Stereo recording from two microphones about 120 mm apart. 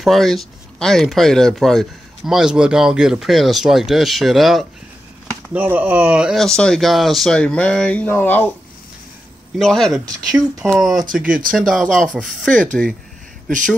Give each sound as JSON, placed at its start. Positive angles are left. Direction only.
{"t": 0.0, "sound": "speech", "side_deg": 0}
{"t": 5.5, "sound": "speech", "side_deg": -10}
{"t": 6.4, "sound": "speech", "side_deg": 5}
{"t": 9.6, "sound": "speech", "side_deg": 5}